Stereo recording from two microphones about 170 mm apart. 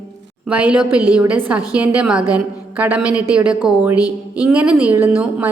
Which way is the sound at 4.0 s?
20° left (ahead or behind).